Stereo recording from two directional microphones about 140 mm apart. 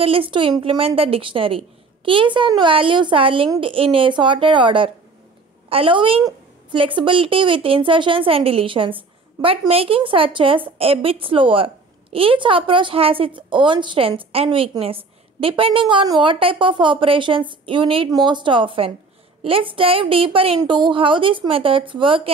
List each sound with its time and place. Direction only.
0.0 s speech: 40° right (ahead or behind)